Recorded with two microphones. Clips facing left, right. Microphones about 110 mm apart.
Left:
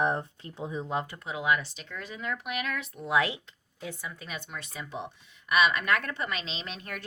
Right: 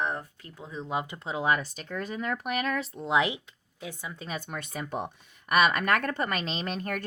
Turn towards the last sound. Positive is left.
turn(degrees=-45)  # may be behind; listen again after turning